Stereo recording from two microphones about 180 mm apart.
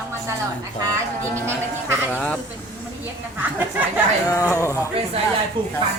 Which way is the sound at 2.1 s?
10° left (ahead or behind).